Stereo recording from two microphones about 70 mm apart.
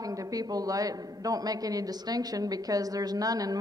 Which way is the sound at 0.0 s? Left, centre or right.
Right.